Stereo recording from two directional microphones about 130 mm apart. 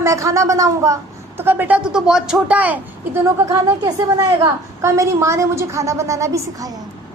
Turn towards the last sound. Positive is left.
turn(degrees=-25)  # may be behind; listen again after turning